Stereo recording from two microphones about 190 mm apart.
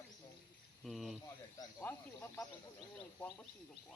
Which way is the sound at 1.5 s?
10° left (ahead or behind).